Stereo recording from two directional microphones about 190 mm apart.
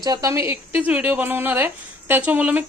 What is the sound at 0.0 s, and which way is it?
A woman's voice, 20° right (ahead or behind).